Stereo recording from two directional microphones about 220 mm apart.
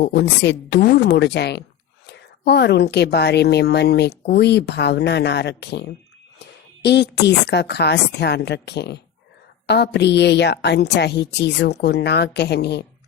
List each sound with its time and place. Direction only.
0.1 s a woman's voice: 50° left (ahead or behind)